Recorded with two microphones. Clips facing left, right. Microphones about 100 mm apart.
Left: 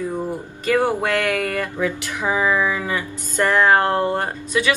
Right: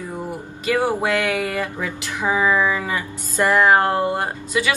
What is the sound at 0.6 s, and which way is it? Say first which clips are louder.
A woman's voice: left 1 dB; 15° right (ahead or behind).